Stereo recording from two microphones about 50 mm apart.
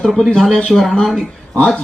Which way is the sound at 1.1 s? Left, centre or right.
Left.